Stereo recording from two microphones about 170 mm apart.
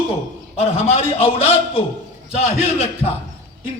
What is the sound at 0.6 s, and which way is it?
A man's voice, 35° left (ahead or behind).